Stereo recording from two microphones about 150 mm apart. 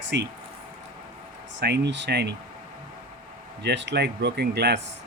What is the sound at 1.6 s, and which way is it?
Speech, 90° right.